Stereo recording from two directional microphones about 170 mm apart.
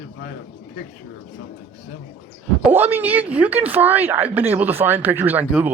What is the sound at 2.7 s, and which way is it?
A woman's voice, 10° right (ahead or behind).